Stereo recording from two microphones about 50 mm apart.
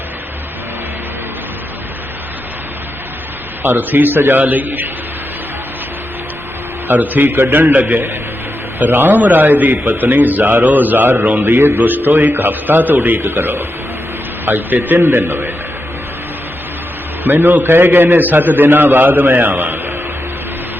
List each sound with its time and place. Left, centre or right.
3.6 s a man's voice: right
6.8 s a man's voice: right
17.2 s a man's voice: right